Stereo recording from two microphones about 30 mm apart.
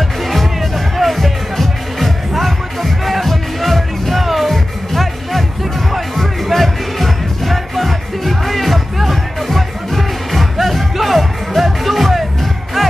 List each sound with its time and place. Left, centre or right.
0.3 s music: centre